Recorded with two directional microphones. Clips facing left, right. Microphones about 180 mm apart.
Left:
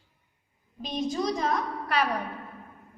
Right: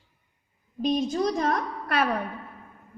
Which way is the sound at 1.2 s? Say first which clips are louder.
Right 2 dB; 55° right (ahead or behind).